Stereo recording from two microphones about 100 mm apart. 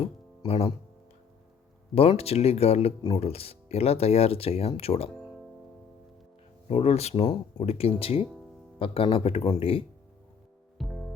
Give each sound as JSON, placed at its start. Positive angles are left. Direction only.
{"t": 0.0, "sound": "music", "side_deg": 80}
{"t": 2.0, "sound": "speech", "side_deg": 80}
{"t": 6.7, "sound": "a man's voice", "side_deg": 90}
{"t": 10.8, "sound": "music", "side_deg": 0}